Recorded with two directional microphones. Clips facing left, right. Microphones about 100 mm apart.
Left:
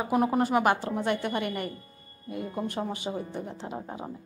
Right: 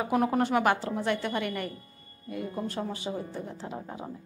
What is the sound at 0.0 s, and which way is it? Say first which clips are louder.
Speech: left 1 dB; 10° left (ahead or behind).